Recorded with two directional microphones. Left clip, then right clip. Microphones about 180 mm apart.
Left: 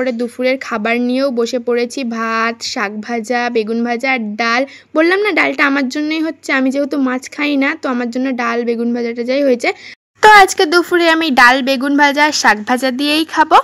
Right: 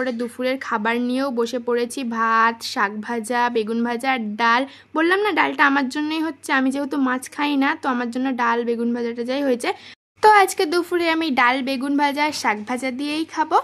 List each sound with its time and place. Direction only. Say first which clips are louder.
0.0 s speech: left 7 dB; 20° left (ahead or behind)